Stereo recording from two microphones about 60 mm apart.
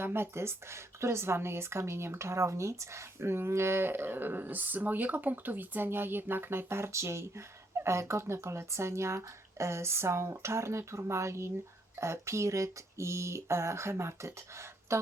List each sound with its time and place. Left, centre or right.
0.0 s speech: right